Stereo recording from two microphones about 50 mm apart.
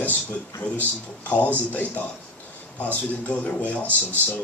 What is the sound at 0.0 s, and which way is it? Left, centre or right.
A man's voice, left.